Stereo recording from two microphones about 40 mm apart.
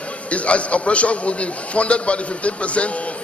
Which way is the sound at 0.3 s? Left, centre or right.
Left.